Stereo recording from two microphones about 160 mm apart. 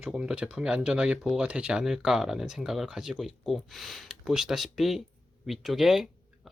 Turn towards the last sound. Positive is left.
turn(degrees=0)  # may be behind; listen again after turning